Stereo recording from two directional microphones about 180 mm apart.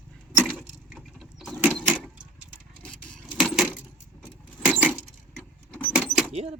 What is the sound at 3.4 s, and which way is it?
Keys jangling, 5° right (ahead or behind).